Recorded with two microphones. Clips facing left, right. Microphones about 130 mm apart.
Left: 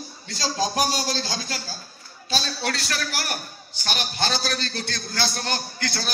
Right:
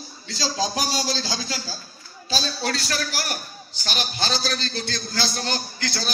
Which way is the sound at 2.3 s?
60° left (ahead or behind).